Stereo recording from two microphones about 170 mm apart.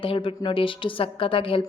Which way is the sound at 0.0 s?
30° left (ahead or behind).